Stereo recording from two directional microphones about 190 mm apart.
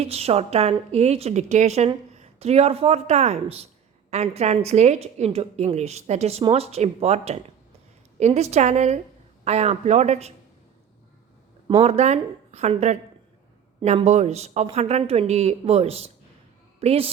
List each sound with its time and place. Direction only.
0.0 s a woman's voice: 35° right (ahead or behind)
11.8 s a woman's voice: 35° right (ahead or behind)